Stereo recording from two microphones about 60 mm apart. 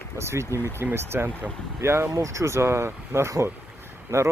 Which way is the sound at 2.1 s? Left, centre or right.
Right.